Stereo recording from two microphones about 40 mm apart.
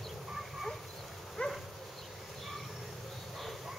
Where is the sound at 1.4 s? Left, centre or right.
Left.